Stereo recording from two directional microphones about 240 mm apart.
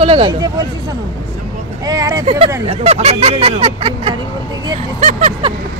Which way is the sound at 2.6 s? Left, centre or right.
Right.